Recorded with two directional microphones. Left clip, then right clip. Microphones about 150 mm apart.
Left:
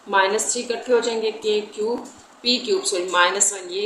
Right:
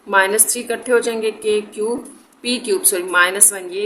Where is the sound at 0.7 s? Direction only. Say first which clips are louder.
Right 3 dB; 50° right (ahead or behind).